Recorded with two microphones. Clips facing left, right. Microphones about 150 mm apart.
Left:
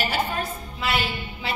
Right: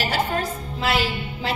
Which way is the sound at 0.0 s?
90° right.